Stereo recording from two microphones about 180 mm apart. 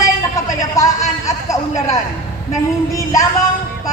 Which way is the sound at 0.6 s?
20° left (ahead or behind).